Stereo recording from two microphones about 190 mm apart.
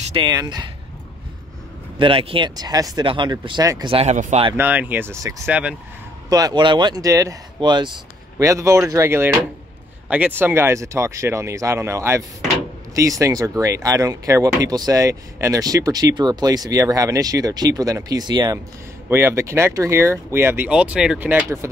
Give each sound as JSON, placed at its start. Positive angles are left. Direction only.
{"t": 0.1, "sound": "speech", "side_deg": -20}
{"t": 2.0, "sound": "speech", "side_deg": -30}
{"t": 3.9, "sound": "speech", "side_deg": -35}
{"t": 4.6, "sound": "speech", "side_deg": -10}
{"t": 6.2, "sound": "speech", "side_deg": -20}